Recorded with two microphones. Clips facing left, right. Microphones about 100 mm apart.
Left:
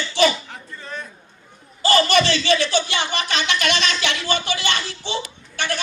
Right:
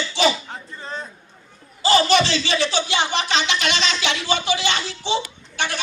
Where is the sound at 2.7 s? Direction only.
50° left (ahead or behind).